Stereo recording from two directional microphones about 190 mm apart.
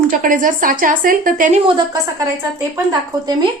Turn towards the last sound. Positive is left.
turn(degrees=-20)  # may be behind; listen again after turning